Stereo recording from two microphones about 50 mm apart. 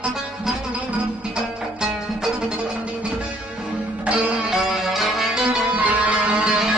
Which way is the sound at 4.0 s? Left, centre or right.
Right.